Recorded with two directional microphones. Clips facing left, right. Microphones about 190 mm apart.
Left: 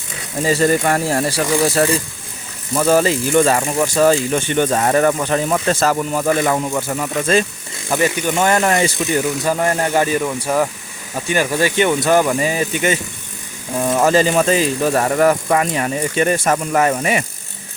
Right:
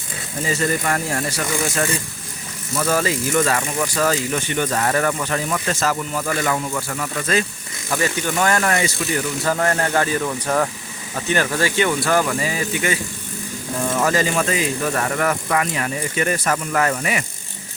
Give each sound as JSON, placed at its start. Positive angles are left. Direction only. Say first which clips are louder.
{"t": 0.4, "sound": "speech", "louder": "left 6 dB", "side_deg": 30}
{"t": 6.4, "sound": "speech", "louder": "left 4 dB", "side_deg": 20}
{"t": 14.0, "sound": "speech", "louder": "left 6 dB", "side_deg": 25}